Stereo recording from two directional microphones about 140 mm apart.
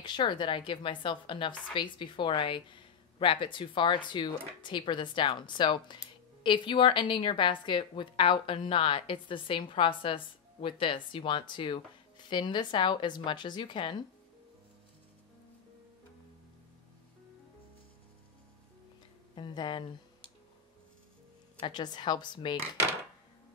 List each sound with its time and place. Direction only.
0.0 s a woman's voice: 30° left (ahead or behind)
19.3 s speech: 35° left (ahead or behind)
21.5 s a woman's voice: 35° left (ahead or behind)